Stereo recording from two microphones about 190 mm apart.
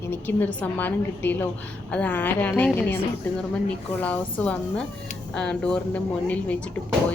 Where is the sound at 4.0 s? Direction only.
5° left (ahead or behind).